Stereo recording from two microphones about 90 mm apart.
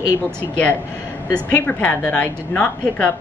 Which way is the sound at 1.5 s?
15° left (ahead or behind).